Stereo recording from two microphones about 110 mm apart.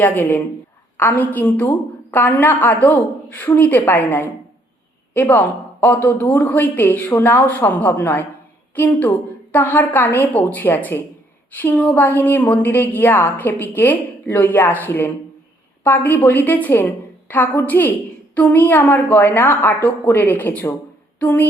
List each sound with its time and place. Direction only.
0.0 s a woman's voice: 15° left (ahead or behind)